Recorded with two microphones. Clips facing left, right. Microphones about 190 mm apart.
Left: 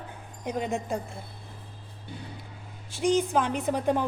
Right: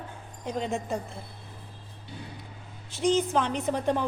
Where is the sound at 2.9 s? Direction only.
15° left (ahead or behind).